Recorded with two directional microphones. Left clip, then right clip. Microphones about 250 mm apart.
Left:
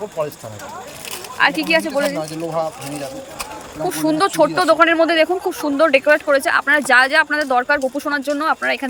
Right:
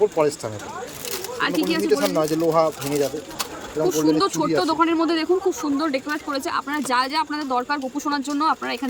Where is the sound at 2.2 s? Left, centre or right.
Right.